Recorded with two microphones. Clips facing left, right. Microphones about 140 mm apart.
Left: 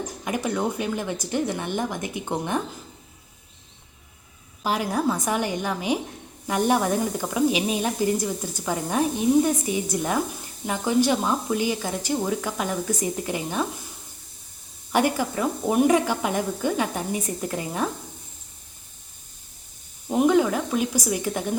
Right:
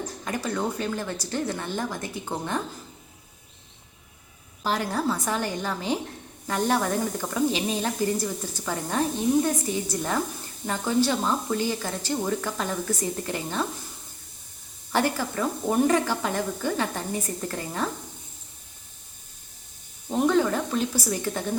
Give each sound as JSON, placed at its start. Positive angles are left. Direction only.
{"t": 0.3, "sound": "speech", "side_deg": 15}
{"t": 4.6, "sound": "speech", "side_deg": 15}
{"t": 14.9, "sound": "speech", "side_deg": 15}
{"t": 20.1, "sound": "speech", "side_deg": 15}